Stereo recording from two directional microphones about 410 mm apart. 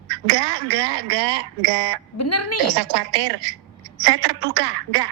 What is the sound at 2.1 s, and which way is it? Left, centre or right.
Speech, left.